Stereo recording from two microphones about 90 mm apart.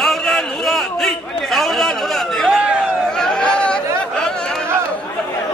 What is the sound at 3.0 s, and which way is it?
Chatter, 5° left (ahead or behind).